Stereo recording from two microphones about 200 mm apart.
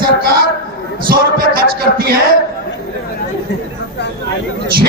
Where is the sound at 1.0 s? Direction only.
45° right (ahead or behind).